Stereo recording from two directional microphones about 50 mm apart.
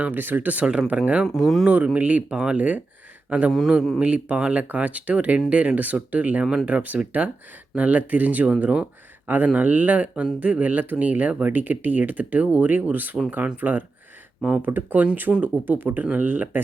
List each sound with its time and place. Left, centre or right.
0.0 s speech: right
0.6 s speech: centre
0.9 s speech: right
1.3 s speech: centre
1.6 s a man's voice: right
9.2 s speech: right